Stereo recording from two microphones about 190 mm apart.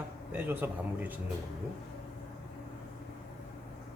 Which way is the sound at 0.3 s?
10° right (ahead or behind).